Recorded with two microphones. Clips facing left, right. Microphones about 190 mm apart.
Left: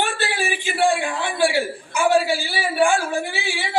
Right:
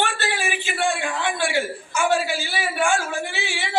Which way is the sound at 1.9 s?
35° left (ahead or behind).